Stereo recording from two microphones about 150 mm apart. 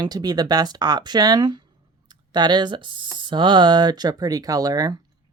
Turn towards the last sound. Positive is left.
turn(degrees=-25)  # may be behind; listen again after turning